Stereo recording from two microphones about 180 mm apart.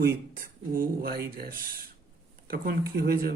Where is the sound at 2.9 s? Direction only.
55° right (ahead or behind).